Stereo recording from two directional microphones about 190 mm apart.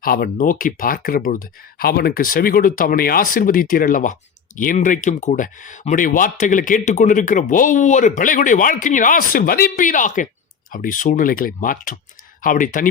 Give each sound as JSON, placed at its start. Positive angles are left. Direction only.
{"t": 0.0, "sound": "speech", "side_deg": 50}